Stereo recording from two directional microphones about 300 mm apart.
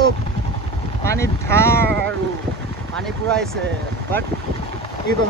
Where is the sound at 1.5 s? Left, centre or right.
Centre.